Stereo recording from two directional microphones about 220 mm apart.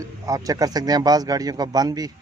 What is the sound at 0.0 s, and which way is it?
Speech, 15° right (ahead or behind).